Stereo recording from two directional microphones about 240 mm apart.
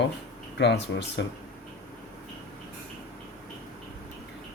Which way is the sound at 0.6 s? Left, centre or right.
Left.